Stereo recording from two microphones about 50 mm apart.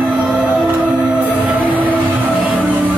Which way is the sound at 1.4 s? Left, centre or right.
Right.